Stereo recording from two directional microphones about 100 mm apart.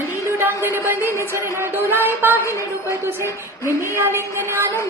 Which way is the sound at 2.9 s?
25° right (ahead or behind).